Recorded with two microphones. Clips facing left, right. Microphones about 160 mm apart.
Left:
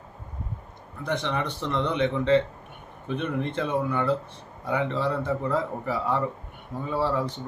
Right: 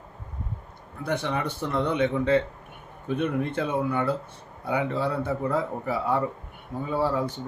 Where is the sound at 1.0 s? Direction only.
10° right (ahead or behind).